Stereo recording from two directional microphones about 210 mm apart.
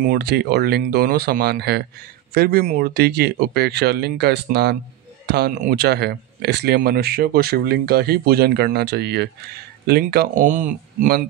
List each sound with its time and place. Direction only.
0.0 s speech: 45° right (ahead or behind)